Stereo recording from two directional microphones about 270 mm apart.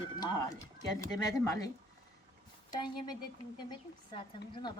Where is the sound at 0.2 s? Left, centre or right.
Centre.